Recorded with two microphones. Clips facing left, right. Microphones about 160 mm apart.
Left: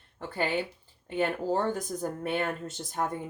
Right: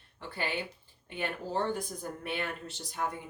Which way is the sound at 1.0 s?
45° left (ahead or behind).